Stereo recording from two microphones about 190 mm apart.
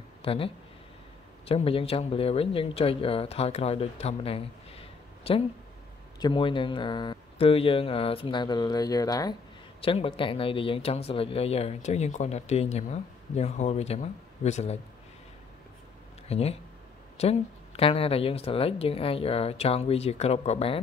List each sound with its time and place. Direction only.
0.2 s speech: 30° left (ahead or behind)
9.8 s speech: 30° left (ahead or behind)
16.3 s speech: 30° left (ahead or behind)